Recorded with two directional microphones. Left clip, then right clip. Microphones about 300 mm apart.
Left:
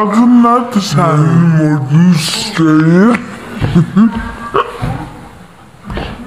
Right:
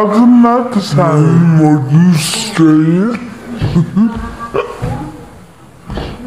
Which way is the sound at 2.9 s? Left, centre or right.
Left.